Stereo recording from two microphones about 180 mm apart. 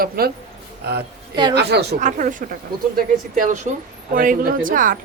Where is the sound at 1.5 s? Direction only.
65° right (ahead or behind).